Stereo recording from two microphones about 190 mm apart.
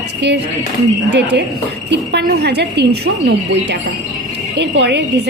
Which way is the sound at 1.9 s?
60° right (ahead or behind).